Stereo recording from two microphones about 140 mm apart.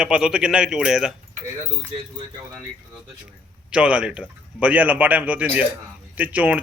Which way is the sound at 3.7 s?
10° right (ahead or behind).